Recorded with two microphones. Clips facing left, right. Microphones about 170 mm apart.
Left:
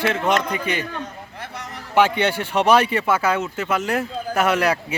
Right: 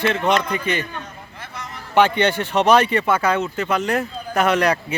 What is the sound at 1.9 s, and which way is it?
Speech, 5° left (ahead or behind).